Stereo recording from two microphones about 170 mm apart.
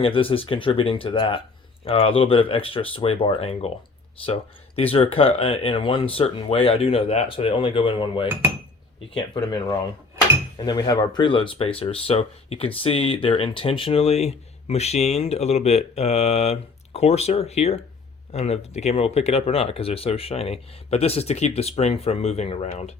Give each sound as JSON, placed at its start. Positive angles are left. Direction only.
{"t": 0.0, "sound": "speech", "side_deg": 30}